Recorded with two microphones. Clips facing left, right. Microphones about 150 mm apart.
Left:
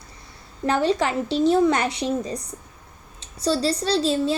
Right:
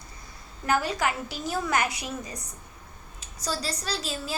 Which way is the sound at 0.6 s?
30° left (ahead or behind).